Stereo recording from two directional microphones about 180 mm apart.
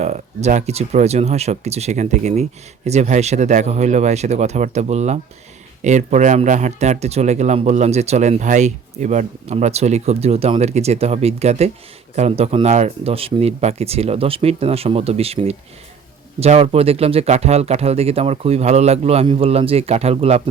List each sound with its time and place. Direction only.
0.0 s speech: 40° right (ahead or behind)